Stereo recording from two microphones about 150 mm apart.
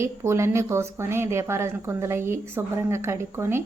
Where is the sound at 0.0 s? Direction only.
20° right (ahead or behind).